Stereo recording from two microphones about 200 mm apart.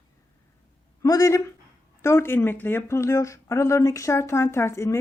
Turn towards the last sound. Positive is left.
turn(degrees=15)  # may be behind; listen again after turning